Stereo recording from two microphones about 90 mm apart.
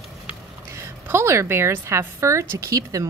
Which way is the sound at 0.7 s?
30° right (ahead or behind).